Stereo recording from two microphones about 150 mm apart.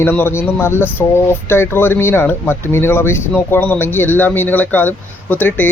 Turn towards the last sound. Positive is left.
turn(degrees=10)  # may be behind; listen again after turning